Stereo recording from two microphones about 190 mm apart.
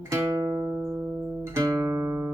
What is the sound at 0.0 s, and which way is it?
Music, 15° right (ahead or behind).